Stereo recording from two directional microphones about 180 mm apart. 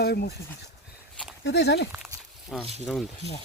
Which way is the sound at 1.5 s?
70° left (ahead or behind).